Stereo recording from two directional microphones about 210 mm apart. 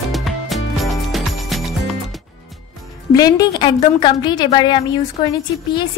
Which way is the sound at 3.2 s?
20° left (ahead or behind).